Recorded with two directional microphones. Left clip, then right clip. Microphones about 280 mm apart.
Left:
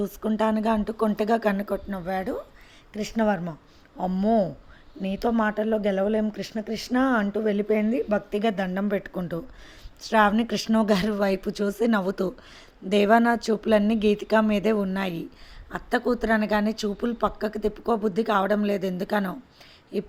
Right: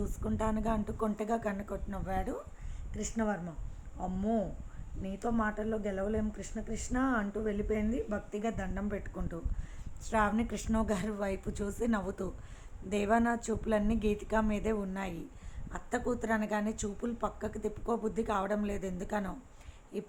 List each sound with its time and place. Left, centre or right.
0.0 s speech: left